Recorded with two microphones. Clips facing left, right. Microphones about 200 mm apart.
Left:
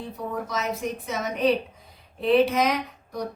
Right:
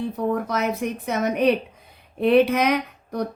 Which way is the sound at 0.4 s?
60° right (ahead or behind).